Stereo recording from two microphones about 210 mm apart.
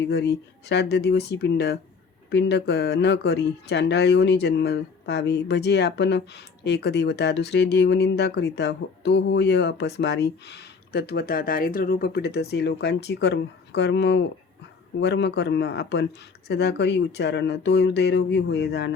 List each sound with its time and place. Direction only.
0.1 s speech: 50° left (ahead or behind)